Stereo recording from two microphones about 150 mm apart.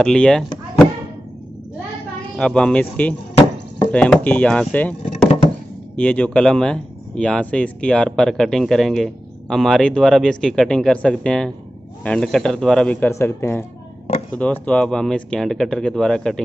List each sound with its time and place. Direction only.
0.0 s speech: 5° left (ahead or behind)
2.3 s speech: 5° left (ahead or behind)
5.9 s speech: 10° left (ahead or behind)